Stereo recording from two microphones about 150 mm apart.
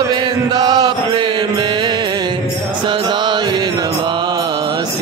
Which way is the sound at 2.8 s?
30° right (ahead or behind).